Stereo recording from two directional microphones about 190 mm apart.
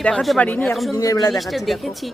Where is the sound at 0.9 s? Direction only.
20° left (ahead or behind).